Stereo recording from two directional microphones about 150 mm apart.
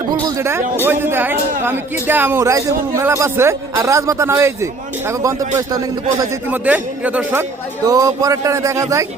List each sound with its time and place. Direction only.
0.1 s a man's voice: 20° right (ahead or behind)
6.5 s a man's voice: 10° right (ahead or behind)
7.9 s speech: 25° right (ahead or behind)